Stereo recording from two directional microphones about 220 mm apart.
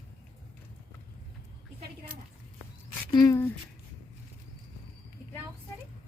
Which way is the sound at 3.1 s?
15° left (ahead or behind).